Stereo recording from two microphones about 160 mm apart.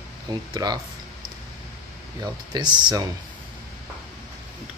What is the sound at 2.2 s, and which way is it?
Speech, 25° right (ahead or behind).